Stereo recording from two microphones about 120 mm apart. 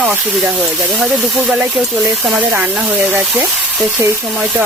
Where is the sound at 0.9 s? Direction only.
10° right (ahead or behind).